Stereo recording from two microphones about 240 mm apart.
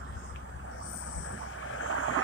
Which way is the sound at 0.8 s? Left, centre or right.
Left.